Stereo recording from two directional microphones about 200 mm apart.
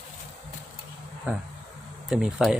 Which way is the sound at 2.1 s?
5° right (ahead or behind).